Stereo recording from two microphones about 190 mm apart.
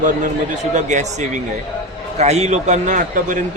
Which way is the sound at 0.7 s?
40° right (ahead or behind).